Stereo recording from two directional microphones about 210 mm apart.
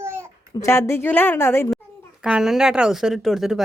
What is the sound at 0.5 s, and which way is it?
A woman's voice, 15° left (ahead or behind).